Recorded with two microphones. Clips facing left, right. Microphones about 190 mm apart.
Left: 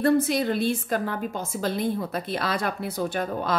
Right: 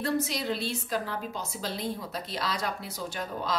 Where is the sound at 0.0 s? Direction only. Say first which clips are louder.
Left 8 dB; 55° left (ahead or behind).